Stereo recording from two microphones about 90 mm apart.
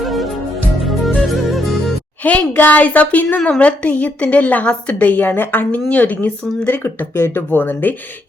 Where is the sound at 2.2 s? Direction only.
15° left (ahead or behind).